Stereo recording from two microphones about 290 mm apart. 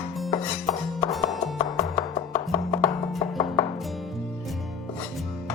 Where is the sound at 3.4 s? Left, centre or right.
Centre.